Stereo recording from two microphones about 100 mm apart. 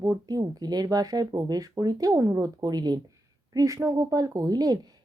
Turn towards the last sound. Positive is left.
turn(degrees=-40)  # may be behind; listen again after turning